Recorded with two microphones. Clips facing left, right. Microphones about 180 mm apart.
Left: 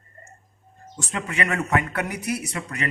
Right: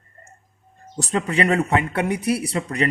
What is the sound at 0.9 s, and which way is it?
Speech, 35° right (ahead or behind).